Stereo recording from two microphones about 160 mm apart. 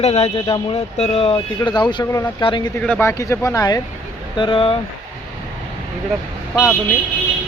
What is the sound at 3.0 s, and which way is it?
Speech, 15° left (ahead or behind).